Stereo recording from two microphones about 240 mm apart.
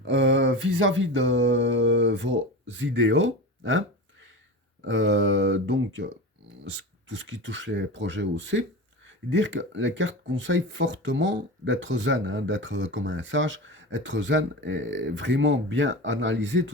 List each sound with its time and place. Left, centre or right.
0.0 s mantra: right
4.8 s speech: right